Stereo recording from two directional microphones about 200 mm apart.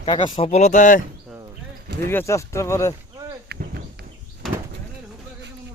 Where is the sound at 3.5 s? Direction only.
50° right (ahead or behind).